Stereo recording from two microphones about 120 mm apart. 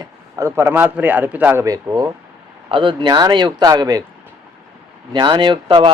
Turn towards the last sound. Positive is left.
turn(degrees=-45)  # may be behind; listen again after turning